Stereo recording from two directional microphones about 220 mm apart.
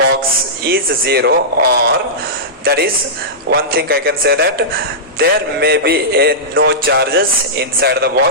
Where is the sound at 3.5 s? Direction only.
45° right (ahead or behind).